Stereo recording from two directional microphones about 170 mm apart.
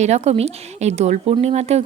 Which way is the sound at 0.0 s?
40° right (ahead or behind).